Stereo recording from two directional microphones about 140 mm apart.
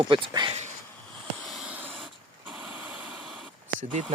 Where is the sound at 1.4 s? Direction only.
Centre (ahead or behind).